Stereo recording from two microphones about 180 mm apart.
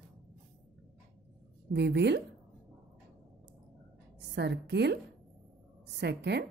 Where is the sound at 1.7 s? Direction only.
70° right (ahead or behind).